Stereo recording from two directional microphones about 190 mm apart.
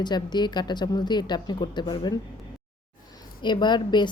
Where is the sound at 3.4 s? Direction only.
25° left (ahead or behind).